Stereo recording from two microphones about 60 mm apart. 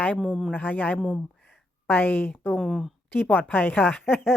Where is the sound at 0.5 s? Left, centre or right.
Left.